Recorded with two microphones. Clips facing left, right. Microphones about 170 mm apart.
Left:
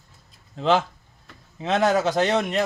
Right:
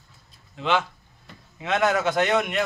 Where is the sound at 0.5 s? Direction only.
35° left (ahead or behind).